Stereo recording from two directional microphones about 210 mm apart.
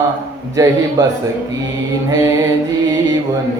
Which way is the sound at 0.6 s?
15° right (ahead or behind).